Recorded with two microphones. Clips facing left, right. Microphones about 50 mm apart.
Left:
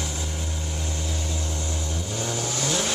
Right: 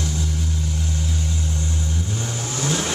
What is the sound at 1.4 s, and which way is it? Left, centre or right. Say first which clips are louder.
Vehicle: right 3 dB; left.